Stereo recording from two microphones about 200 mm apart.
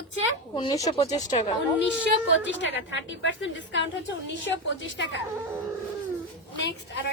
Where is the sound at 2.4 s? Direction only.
65° left (ahead or behind).